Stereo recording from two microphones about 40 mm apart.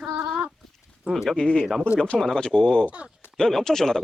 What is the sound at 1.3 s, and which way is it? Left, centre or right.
Speech, left.